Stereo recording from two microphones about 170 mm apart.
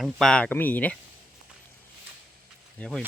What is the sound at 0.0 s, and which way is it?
Speech, 5° left (ahead or behind).